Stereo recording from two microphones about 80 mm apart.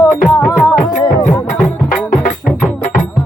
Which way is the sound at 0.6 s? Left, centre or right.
Left.